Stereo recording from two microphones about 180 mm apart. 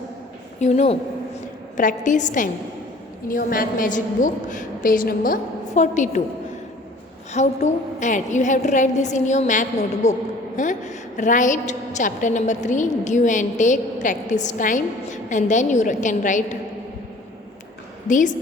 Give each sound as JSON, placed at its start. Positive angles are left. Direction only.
{"t": 0.6, "sound": "a woman's voice", "side_deg": 35}
{"t": 7.3, "sound": "a woman's voice", "side_deg": 40}
{"t": 18.1, "sound": "a woman's voice", "side_deg": 45}